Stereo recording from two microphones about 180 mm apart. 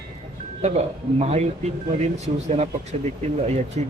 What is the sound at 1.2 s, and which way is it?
A man's voice, 40° right (ahead or behind).